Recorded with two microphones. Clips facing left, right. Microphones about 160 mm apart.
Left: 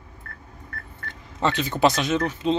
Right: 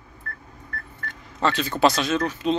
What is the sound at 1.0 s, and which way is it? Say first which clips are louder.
Speech: even; 20° left (ahead or behind).